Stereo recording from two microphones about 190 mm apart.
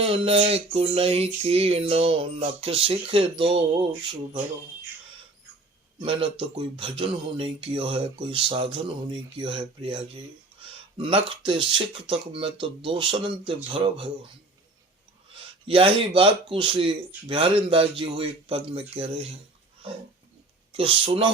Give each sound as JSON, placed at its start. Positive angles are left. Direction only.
{"t": 0.0, "sound": "a sound", "side_deg": -30}
{"t": 6.0, "sound": "speech", "side_deg": -25}
{"t": 15.6, "sound": "speech", "side_deg": -30}
{"t": 20.7, "sound": "speech", "side_deg": -30}